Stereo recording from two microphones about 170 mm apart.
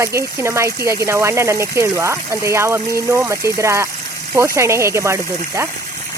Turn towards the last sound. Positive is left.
turn(degrees=-15)  # may be behind; listen again after turning